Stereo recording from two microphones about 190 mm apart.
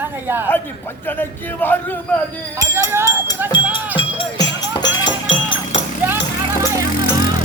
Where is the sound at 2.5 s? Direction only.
10° right (ahead or behind).